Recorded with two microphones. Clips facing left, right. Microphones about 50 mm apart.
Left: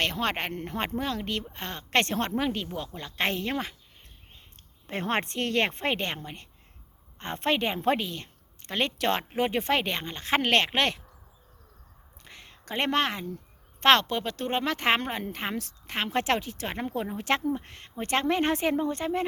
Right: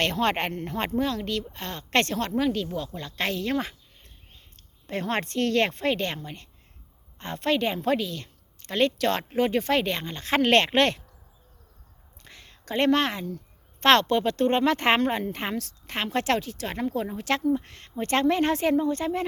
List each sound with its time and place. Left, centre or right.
0.0 s speech: centre
2.1 s a woman's voice: left
3.2 s a woman's voice: left
4.9 s a woman's voice: left
12.2 s a sound: centre
13.8 s speech: centre
16.0 s a woman's voice: centre